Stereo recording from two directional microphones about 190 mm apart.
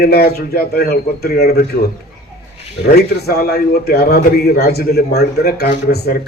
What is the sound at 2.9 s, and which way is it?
A man's voice, 55° left (ahead or behind).